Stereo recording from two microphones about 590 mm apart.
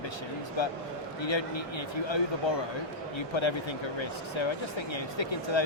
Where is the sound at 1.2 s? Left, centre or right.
Left.